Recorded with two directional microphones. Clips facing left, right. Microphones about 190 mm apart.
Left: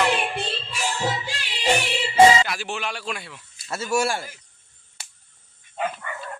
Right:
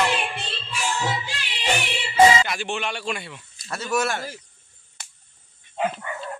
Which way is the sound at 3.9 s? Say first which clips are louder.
Left 1 dB; 30° left (ahead or behind).